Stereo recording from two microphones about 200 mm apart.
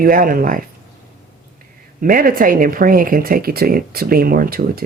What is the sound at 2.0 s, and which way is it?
Speech, 45° right (ahead or behind).